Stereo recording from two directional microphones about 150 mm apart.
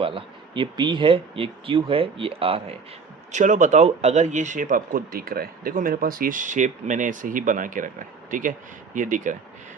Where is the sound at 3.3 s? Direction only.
55° right (ahead or behind).